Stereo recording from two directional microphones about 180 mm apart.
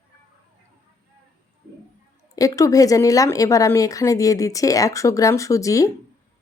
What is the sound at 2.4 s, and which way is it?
A woman's voice, 20° left (ahead or behind).